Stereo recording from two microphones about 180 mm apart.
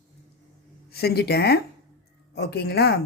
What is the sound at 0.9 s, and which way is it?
Speech, 60° left (ahead or behind).